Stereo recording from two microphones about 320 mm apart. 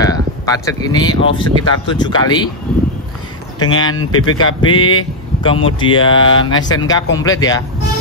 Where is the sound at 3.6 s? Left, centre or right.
Centre.